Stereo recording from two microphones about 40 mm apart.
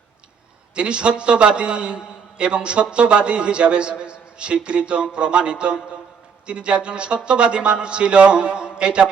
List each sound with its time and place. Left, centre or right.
0.8 s speech: right